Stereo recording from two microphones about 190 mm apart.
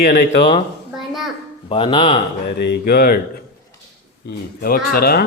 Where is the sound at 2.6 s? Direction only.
55° left (ahead or behind).